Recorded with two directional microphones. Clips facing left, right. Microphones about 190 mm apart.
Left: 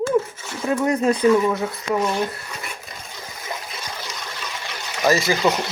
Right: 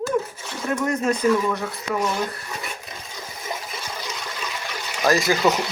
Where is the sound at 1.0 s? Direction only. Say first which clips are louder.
Left 4 dB; 30° left (ahead or behind).